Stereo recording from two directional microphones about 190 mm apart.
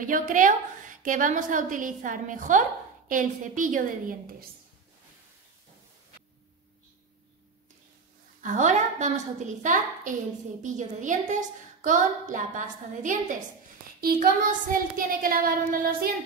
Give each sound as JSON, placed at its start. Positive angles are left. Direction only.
{"t": 0.0, "sound": "a woman's voice", "side_deg": -45}
{"t": 8.4, "sound": "a woman's voice", "side_deg": -40}